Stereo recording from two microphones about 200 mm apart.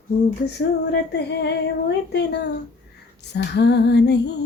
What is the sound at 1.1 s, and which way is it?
Female singing, 60° left (ahead or behind).